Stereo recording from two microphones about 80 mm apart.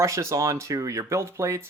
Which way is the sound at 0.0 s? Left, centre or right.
Right.